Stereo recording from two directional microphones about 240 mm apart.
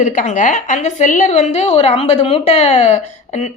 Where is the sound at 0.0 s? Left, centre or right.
Left.